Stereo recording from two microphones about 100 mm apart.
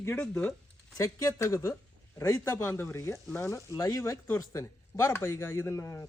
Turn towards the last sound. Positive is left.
turn(degrees=30)  # may be behind; listen again after turning